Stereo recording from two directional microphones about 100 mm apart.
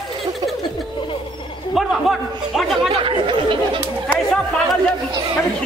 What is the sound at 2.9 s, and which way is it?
Chatter, 60° right (ahead or behind).